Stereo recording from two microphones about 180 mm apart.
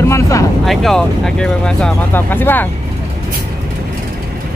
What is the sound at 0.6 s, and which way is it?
Speech, centre (ahead or behind).